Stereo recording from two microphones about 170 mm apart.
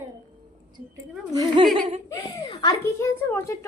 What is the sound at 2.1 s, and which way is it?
Speech, 20° left (ahead or behind).